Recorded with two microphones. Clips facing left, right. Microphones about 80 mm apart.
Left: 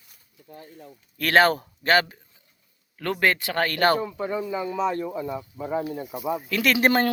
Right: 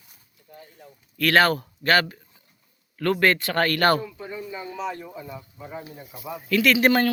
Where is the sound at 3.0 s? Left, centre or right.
Centre.